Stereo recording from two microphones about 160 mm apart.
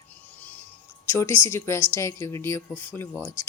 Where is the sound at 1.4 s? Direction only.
15° left (ahead or behind).